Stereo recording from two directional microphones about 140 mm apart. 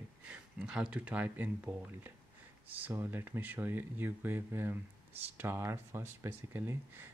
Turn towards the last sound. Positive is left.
turn(degrees=-15)  # may be behind; listen again after turning